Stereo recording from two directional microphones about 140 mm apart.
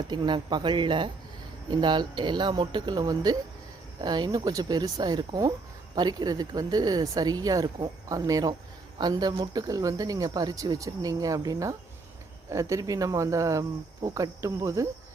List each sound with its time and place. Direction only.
0.1 s speech: 30° right (ahead or behind)